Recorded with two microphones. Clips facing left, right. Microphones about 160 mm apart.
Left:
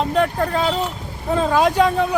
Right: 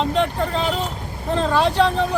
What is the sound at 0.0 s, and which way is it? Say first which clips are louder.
Speech: left 2 dB; 5° left (ahead or behind).